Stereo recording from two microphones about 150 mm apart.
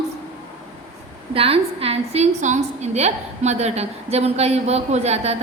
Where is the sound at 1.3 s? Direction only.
40° right (ahead or behind).